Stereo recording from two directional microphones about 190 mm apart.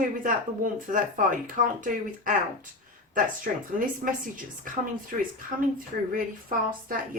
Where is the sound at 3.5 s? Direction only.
50° right (ahead or behind).